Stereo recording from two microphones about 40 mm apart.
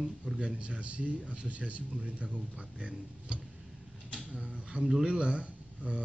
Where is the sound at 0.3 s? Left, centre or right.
Centre.